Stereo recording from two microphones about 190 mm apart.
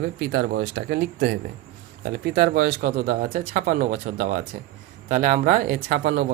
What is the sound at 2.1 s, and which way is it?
Speech, 55° right (ahead or behind).